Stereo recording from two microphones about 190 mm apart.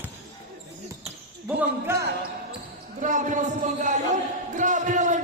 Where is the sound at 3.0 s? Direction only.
40° right (ahead or behind).